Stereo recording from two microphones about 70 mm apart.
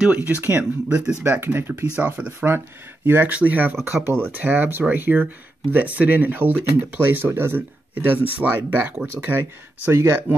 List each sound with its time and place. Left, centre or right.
0.1 s speech: right